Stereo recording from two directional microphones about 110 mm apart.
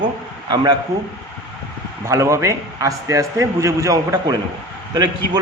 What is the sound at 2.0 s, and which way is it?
A man's voice, 30° right (ahead or behind).